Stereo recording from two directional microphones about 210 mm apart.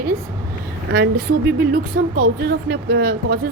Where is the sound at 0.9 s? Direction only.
55° right (ahead or behind).